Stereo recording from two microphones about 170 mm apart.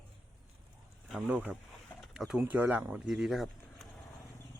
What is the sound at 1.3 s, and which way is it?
Speech, 10° right (ahead or behind).